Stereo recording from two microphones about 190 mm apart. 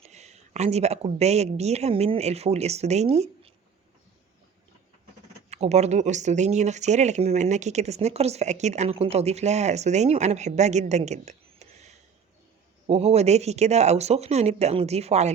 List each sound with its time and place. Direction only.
0.0 s speech: 35° right (ahead or behind)
5.5 s speech: 35° right (ahead or behind)